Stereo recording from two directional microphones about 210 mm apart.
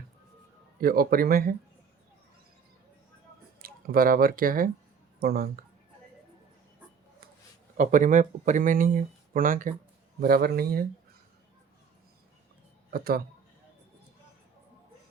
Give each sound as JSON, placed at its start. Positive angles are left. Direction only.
{"t": 0.8, "sound": "a man's voice", "side_deg": -45}
{"t": 3.6, "sound": "a man's voice", "side_deg": -45}
{"t": 7.8, "sound": "a man's voice", "side_deg": -40}
{"t": 12.9, "sound": "a man's voice", "side_deg": -45}